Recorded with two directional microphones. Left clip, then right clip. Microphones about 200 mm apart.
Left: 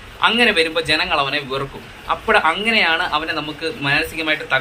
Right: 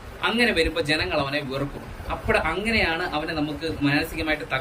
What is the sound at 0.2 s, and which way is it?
A man's voice, 10° right (ahead or behind).